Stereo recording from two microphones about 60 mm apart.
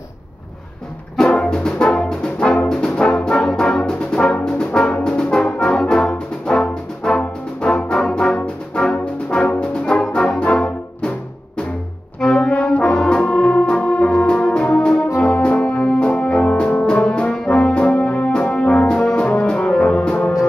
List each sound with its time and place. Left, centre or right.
1.1 s brass instrument: centre
8.9 s music: centre
12.2 s brass instrument: centre
14.2 s organ: centre
15.3 s music: centre
17.5 s brass instrument: left
19.4 s music: centre